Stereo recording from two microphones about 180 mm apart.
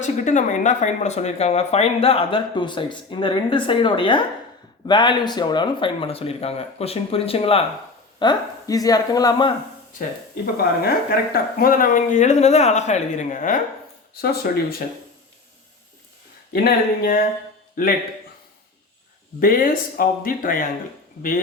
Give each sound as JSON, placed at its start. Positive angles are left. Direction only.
{"t": 0.0, "sound": "speech", "side_deg": 45}
{"t": 8.2, "sound": "speech", "side_deg": 20}
{"t": 10.0, "sound": "speech", "side_deg": 55}
{"t": 14.1, "sound": "speech", "side_deg": 60}
{"t": 16.5, "sound": "speech", "side_deg": 60}
{"t": 19.4, "sound": "speech", "side_deg": 50}